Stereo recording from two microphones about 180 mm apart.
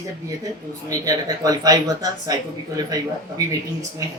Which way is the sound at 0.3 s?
20° right (ahead or behind).